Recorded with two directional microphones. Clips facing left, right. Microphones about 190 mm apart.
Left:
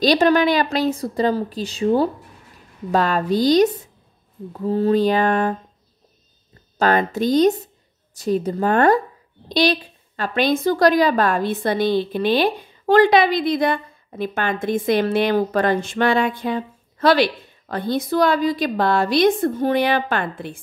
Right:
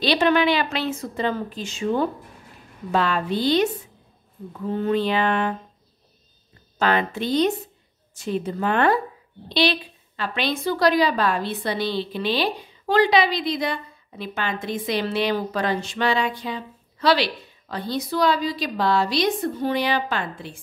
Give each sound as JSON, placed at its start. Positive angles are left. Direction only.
{"t": 0.0, "sound": "a woman's voice", "side_deg": 40}
{"t": 6.8, "sound": "a woman's voice", "side_deg": 45}